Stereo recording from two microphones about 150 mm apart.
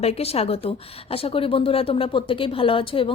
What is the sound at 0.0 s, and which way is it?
A woman's voice, 45° left (ahead or behind).